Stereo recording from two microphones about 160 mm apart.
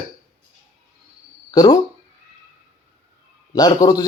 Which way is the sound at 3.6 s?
25° left (ahead or behind).